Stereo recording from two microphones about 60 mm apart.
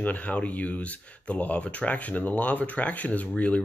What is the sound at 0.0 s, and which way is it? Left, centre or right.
Speech, left.